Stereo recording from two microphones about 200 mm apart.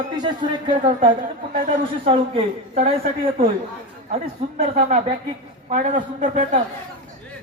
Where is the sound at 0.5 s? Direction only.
25° right (ahead or behind).